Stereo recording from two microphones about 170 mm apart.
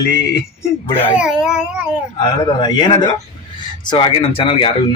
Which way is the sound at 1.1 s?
5° right (ahead or behind).